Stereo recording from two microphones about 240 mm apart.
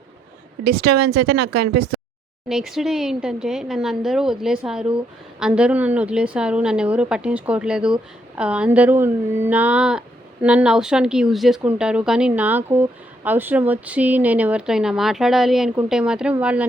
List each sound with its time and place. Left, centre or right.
0.6 s speech: right
2.5 s speech: centre